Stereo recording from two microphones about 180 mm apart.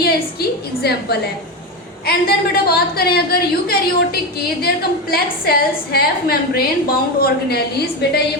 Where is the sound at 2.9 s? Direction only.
60° left (ahead or behind).